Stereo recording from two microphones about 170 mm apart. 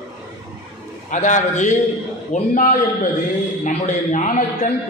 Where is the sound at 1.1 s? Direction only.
45° left (ahead or behind).